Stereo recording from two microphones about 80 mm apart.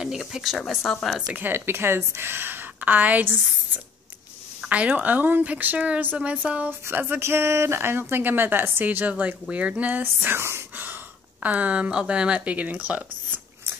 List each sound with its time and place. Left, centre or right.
0.0 s speech: centre
1.3 s speech: right
11.4 s speech: centre